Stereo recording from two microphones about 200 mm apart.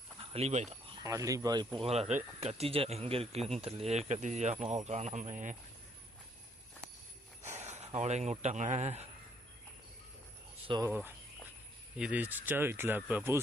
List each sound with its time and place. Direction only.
0.3 s speech: 35° right (ahead or behind)
1.0 s speech: 15° right (ahead or behind)
1.8 s speech: 30° right (ahead or behind)
7.6 s speech: 30° right (ahead or behind)
10.7 s speech: 15° right (ahead or behind)